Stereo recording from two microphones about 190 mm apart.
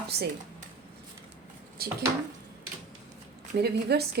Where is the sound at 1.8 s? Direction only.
55° right (ahead or behind).